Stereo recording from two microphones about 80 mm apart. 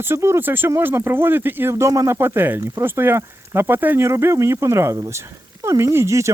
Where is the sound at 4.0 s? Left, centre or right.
Right.